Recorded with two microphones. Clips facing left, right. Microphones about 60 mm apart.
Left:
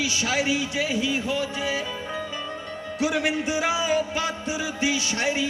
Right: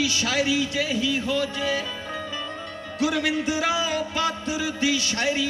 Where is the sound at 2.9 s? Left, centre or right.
Left.